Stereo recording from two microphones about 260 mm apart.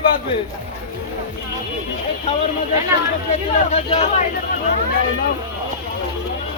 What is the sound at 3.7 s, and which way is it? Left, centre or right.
Speech, left.